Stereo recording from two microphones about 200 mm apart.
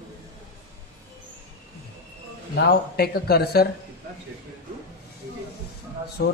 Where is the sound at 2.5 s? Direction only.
55° left (ahead or behind).